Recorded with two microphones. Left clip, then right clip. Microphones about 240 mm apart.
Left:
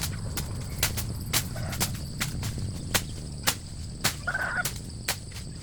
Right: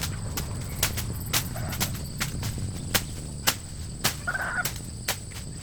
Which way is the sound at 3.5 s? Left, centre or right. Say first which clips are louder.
Right 2 dB; centre.